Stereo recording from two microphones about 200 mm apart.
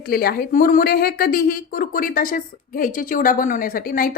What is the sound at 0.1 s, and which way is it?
A woman's voice, 50° left (ahead or behind).